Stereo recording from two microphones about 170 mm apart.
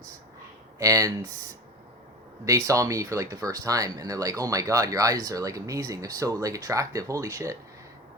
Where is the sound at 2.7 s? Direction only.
20° right (ahead or behind).